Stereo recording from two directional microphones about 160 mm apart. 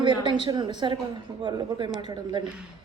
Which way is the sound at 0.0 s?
30° right (ahead or behind).